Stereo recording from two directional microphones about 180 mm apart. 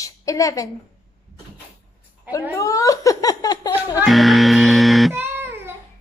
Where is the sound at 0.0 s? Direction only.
20° left (ahead or behind).